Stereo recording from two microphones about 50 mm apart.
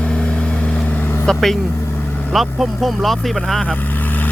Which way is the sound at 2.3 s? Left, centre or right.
Centre.